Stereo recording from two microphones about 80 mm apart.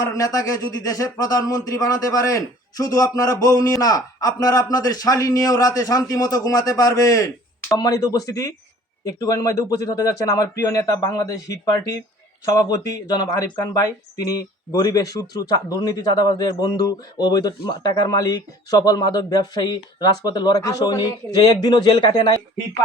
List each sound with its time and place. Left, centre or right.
0.0 s speech: left